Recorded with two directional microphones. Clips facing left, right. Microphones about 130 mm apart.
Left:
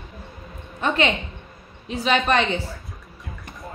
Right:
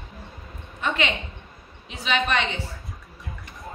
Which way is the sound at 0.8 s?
35° left (ahead or behind).